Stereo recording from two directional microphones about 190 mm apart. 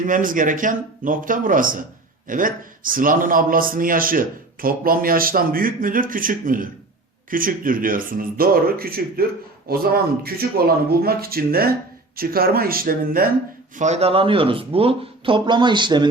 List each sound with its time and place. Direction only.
0.0 s a man's voice: 45° right (ahead or behind)
13.7 s speech: 35° right (ahead or behind)